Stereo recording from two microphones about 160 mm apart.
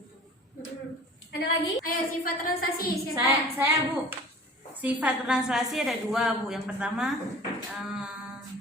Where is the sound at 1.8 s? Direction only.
60° left (ahead or behind).